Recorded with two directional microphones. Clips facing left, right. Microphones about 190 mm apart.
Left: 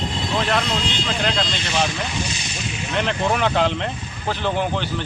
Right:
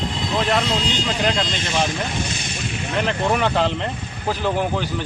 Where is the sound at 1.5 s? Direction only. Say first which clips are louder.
Right 1 dB; 55° right (ahead or behind).